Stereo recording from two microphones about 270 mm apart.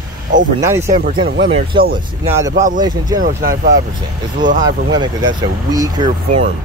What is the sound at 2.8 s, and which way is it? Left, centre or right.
Speech, centre.